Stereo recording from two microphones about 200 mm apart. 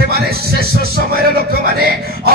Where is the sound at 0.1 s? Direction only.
50° right (ahead or behind).